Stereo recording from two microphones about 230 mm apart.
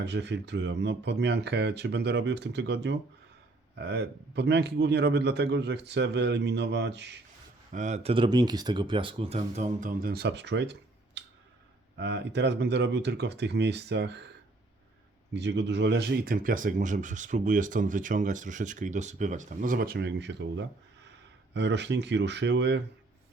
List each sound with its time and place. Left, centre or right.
0.0 s a man's voice: right
7.7 s a man's voice: right
15.3 s a man's voice: right